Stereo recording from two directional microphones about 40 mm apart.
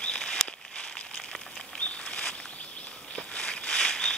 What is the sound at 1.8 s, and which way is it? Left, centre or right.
Patter, left.